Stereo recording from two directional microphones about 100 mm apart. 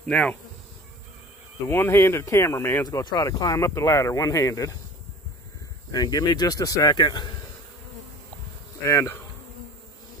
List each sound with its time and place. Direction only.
0.0 s speech: 10° left (ahead or behind)
1.7 s speech: 25° left (ahead or behind)
2.8 s speech: 40° left (ahead or behind)
5.9 s speech: 40° left (ahead or behind)
8.8 s speech: 30° left (ahead or behind)